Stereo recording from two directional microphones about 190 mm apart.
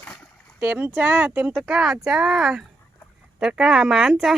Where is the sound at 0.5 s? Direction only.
10° right (ahead or behind).